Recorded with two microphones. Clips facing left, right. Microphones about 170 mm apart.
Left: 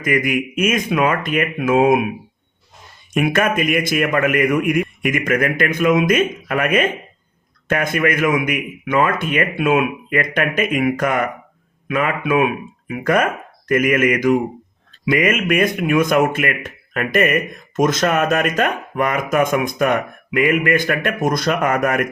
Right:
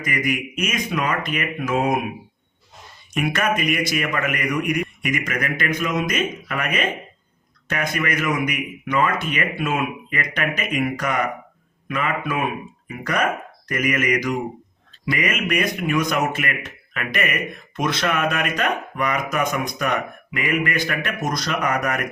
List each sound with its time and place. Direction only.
0.0 s a man's voice: 50° left (ahead or behind)
3.2 s a man's voice: 50° left (ahead or behind)